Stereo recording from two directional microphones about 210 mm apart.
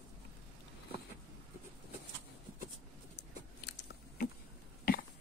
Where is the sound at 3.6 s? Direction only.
55° left (ahead or behind).